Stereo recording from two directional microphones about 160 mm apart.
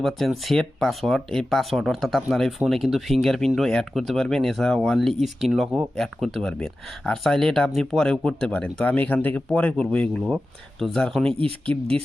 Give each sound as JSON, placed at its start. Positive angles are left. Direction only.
{"t": 0.0, "sound": "speech", "side_deg": 0}
{"t": 11.3, "sound": "speech", "side_deg": -35}